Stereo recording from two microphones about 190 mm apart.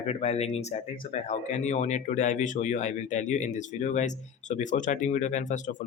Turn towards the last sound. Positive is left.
turn(degrees=40)  # may be behind; listen again after turning